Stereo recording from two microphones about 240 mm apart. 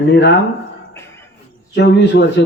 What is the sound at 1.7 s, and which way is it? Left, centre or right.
Speech, left.